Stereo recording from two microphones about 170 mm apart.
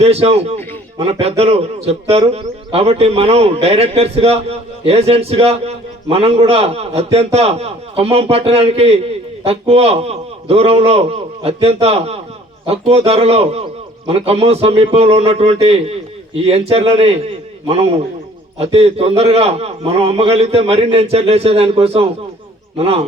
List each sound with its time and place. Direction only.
0.0 s a man's voice: 35° right (ahead or behind)